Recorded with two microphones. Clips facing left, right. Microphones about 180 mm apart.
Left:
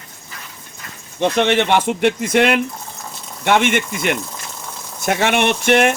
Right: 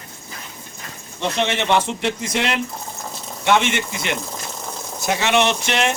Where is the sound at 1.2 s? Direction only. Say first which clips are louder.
Left 6 dB; 60° left (ahead or behind).